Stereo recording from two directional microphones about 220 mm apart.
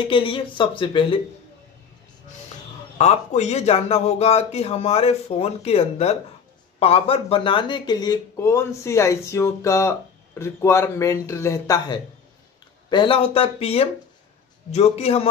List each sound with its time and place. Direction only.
0.1 s speech: 25° left (ahead or behind)
3.0 s speech: 30° left (ahead or behind)